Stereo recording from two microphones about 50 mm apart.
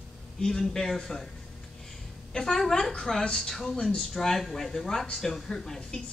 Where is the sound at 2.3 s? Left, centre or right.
Centre.